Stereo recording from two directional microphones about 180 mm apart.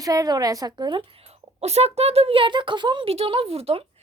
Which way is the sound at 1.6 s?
35° right (ahead or behind).